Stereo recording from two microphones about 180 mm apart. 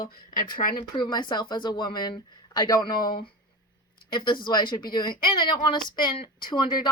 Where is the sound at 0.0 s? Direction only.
55° left (ahead or behind).